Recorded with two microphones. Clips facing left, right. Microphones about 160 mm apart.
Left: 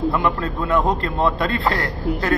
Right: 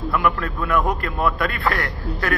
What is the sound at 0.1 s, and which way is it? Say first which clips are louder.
A man's voice: left 1 dB; 25° left (ahead or behind).